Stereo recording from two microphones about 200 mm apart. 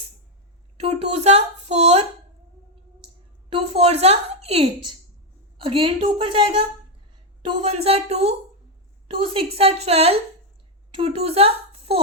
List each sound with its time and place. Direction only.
0.8 s a woman's voice: 30° right (ahead or behind)
3.5 s a woman's voice: 30° right (ahead or behind)